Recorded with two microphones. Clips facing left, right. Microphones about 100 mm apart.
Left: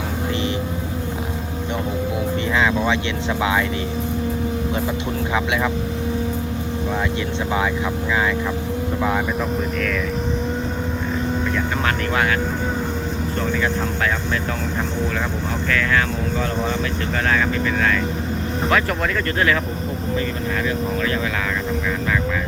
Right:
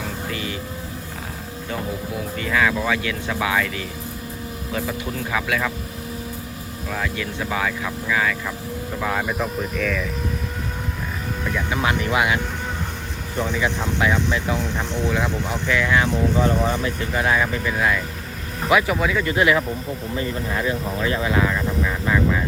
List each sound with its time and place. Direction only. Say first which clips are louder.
2.5 s speech: even; 20° left (ahead or behind)
5.3 s speech: left 2 dB; 20° left (ahead or behind)
8.1 s speech: left 1 dB; 25° left (ahead or behind)
11.5 s speech: left 1 dB; 10° right (ahead or behind)
15.7 s speech: right 1 dB; 15° right (ahead or behind)
18.7 s speech: right 3 dB; 5° right (ahead or behind)
20.7 s vehicle: left 1 dB; 25° right (ahead or behind)